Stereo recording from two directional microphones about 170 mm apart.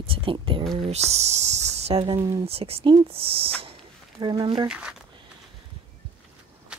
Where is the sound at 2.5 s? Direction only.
35° right (ahead or behind).